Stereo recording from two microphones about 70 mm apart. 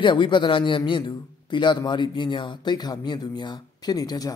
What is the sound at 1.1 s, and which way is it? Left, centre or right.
Speech, left.